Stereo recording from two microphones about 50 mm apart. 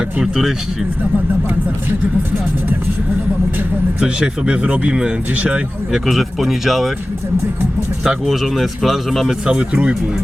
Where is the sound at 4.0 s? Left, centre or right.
Right.